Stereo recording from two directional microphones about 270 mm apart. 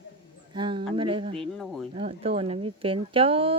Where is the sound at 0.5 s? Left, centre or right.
Centre.